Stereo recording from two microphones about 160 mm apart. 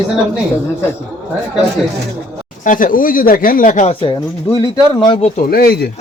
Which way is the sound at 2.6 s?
55° left (ahead or behind).